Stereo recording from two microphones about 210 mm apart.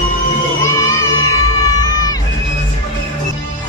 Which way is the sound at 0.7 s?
15° left (ahead or behind).